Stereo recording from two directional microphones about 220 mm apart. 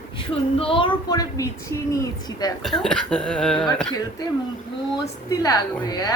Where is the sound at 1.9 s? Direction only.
15° left (ahead or behind).